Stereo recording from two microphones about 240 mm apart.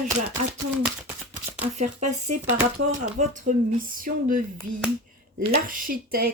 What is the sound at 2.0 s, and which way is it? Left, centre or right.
Speech, right.